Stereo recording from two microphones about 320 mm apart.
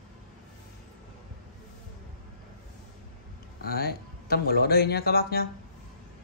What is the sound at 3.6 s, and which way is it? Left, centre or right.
Speech, left.